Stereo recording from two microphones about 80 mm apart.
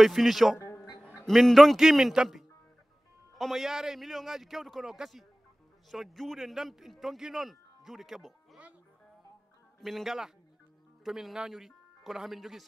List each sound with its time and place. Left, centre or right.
0.0 s a man's voice: centre
9.8 s a man's voice: centre